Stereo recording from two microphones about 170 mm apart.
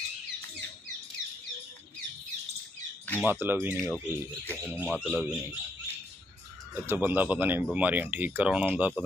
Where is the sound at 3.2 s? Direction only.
15° right (ahead or behind).